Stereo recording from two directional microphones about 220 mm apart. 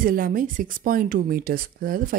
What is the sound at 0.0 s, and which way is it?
Speech, 40° right (ahead or behind).